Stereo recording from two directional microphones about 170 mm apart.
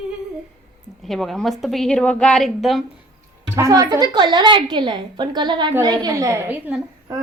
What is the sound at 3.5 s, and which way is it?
A woman's voice, 20° right (ahead or behind).